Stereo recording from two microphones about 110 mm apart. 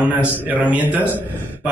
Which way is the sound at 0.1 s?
15° right (ahead or behind).